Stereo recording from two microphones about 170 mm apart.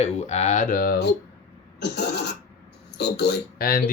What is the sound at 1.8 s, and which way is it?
Speech, 75° left (ahead or behind).